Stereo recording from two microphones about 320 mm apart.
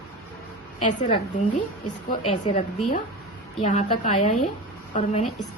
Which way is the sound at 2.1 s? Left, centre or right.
Left.